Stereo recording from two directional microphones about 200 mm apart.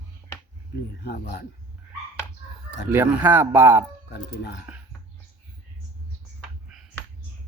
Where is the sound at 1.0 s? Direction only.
55° left (ahead or behind).